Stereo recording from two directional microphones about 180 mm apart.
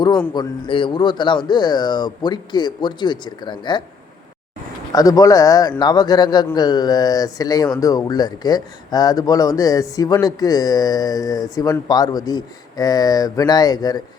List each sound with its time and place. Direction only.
0.3 s speech: 25° left (ahead or behind)
4.9 s speech: 20° left (ahead or behind)